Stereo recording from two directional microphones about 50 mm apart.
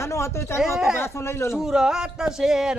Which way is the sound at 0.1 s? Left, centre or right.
Left.